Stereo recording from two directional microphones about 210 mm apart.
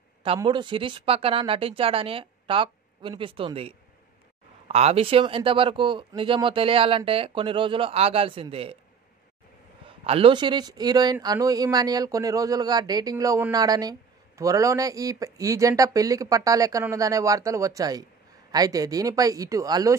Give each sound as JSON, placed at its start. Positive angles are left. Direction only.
{"t": 0.2, "sound": "speech", "side_deg": -25}
{"t": 9.8, "sound": "speech", "side_deg": -25}